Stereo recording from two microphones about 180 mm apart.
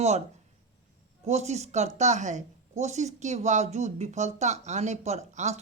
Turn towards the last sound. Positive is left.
turn(degrees=-40)  # may be behind; listen again after turning